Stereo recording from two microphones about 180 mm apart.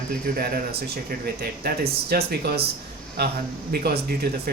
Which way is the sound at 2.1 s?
60° right (ahead or behind).